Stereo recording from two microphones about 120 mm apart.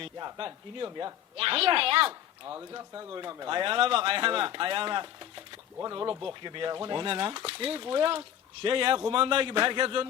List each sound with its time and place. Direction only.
0.3 s speech: 40° right (ahead or behind)
1.4 s speech: 50° right (ahead or behind)
2.5 s speech: 25° right (ahead or behind); by 5.4 s 45° right (ahead or behind)
5.8 s speech: 35° right (ahead or behind)